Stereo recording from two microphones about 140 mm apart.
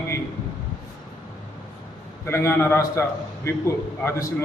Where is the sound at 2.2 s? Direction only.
20° left (ahead or behind).